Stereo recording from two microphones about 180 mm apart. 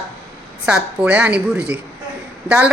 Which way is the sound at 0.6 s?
5° right (ahead or behind).